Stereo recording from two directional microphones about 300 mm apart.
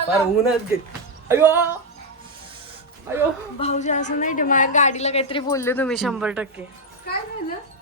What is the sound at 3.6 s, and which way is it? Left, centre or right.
A woman's voice, left.